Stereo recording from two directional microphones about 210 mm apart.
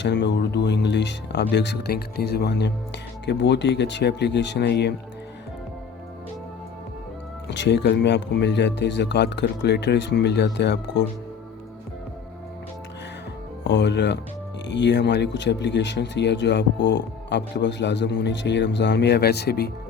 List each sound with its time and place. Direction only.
0.0 s speech: 55° left (ahead or behind)
7.4 s speech: 55° left (ahead or behind)
13.7 s speech: 55° left (ahead or behind)